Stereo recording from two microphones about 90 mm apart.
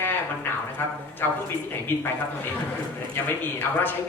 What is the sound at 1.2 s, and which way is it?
Speech, 25° left (ahead or behind).